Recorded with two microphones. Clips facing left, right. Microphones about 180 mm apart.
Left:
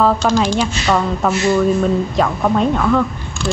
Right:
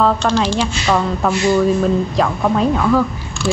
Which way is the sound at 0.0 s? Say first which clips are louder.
Left 1 dB; 5° left (ahead or behind).